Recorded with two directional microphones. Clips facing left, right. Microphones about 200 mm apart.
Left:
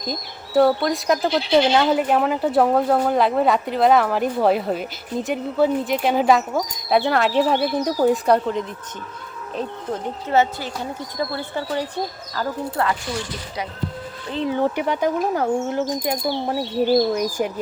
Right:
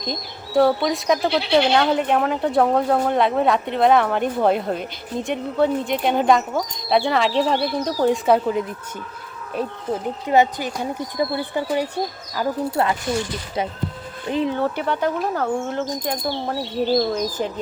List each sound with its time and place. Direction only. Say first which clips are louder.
0.0 s speech: even; 5° left (ahead or behind)
8.0 s speech: right 1 dB; centre (ahead or behind); by 13.7 s 25° right (ahead or behind)
14.5 s speech: left 2 dB; 15° left (ahead or behind)